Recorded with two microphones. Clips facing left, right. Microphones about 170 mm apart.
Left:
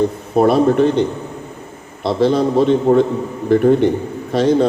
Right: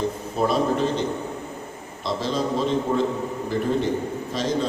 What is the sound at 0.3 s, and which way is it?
Speech, 60° left (ahead or behind).